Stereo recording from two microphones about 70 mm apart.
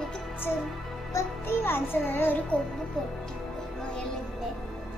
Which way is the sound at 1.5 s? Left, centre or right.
Left.